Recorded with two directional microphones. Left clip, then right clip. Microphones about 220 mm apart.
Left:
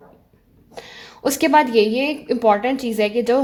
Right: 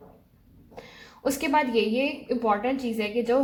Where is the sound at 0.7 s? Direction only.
40° left (ahead or behind).